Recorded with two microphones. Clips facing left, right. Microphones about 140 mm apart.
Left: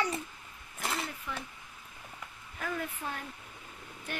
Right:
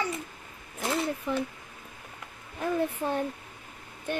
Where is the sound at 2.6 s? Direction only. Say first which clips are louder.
Right 8 dB; 30° right (ahead or behind).